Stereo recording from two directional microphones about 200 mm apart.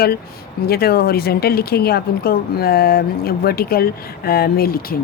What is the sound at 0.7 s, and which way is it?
Speech, 50° left (ahead or behind).